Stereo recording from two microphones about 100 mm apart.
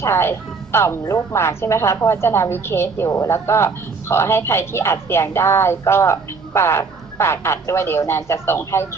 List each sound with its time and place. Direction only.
0.0 s a woman's voice: 25° left (ahead or behind)